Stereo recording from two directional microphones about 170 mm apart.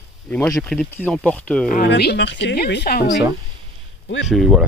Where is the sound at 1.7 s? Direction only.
70° left (ahead or behind).